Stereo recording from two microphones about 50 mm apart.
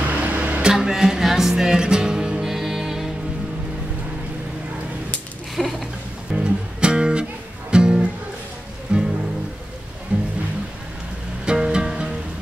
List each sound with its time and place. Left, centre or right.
0.2 s a sound: right
0.6 s music: centre
5.6 s a sound: centre
6.3 s music: centre
10.1 s music: right
11.4 s music: centre